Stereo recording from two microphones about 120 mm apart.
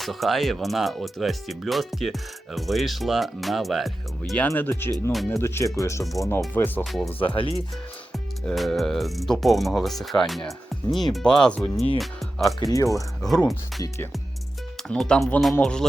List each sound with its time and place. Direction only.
0.0 s speech: centre (ahead or behind)
4.4 s speech: 15° left (ahead or behind)
6.5 s speech: 15° left (ahead or behind)
7.3 s speech: 55° left (ahead or behind)
8.1 s speech: centre (ahead or behind)
12.5 s speech: 30° left (ahead or behind)
14.8 s speech: 5° left (ahead or behind)